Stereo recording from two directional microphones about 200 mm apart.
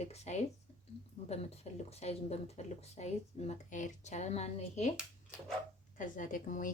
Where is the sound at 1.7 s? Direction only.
30° left (ahead or behind).